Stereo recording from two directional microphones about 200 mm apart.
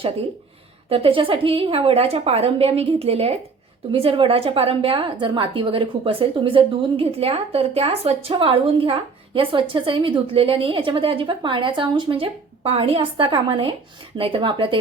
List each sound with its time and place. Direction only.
0.9 s a woman's voice: 25° right (ahead or behind)